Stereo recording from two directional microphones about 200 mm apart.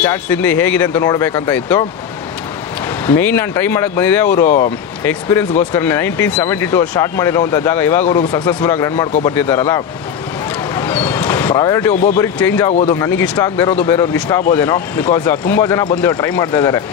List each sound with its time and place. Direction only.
0.0 s speech: 10° left (ahead or behind)
3.1 s speech: 10° left (ahead or behind)
5.7 s speech: 10° left (ahead or behind)
10.7 s vehicle: 10° left (ahead or behind)
12.2 s speech: 10° left (ahead or behind)